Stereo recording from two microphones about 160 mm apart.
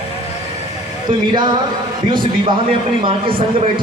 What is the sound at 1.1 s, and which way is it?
A man's voice, 30° right (ahead or behind).